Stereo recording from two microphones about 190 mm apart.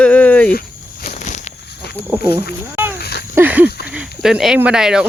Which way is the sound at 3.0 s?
55° left (ahead or behind).